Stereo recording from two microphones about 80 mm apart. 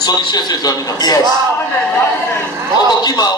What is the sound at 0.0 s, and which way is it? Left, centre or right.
A man's voice, left.